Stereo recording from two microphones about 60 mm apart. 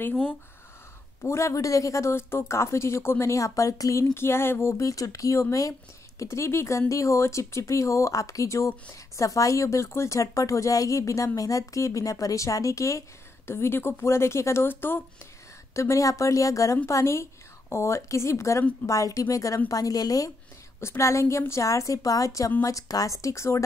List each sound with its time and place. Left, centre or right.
1.2 s speech: left
4.1 s speech: left
4.8 s speech: left
6.2 s a woman's voice: left
13.5 s speech: left
15.7 s a woman's voice: left
16.8 s speech: left
18.9 s speech: left
19.7 s a woman's voice: left
20.8 s a woman's voice: left